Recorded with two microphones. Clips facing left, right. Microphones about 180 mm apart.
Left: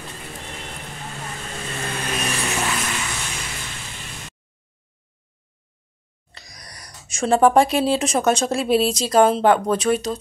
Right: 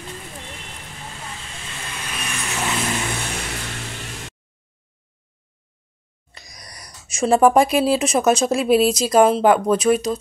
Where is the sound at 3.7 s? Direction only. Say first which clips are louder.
Right 4 dB; 65° right (ahead or behind).